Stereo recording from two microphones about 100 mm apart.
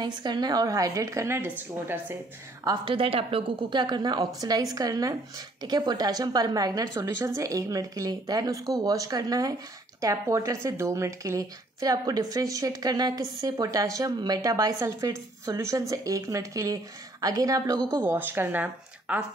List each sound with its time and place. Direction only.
0.0 s speech: 45° right (ahead or behind); by 1.5 s 25° right (ahead or behind)
2.6 s a woman's voice: 50° right (ahead or behind)
7.1 s speech: 25° right (ahead or behind)
18.0 s speech: 20° right (ahead or behind)